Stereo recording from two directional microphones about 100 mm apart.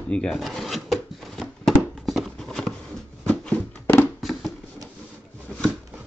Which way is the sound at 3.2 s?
15° left (ahead or behind).